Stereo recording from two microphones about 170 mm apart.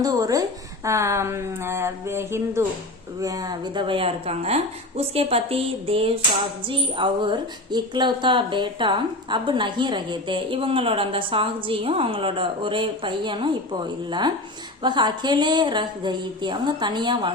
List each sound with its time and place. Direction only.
0.0 s a woman's voice: 20° right (ahead or behind)